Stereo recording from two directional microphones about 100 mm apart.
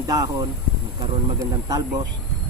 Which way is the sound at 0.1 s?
40° right (ahead or behind).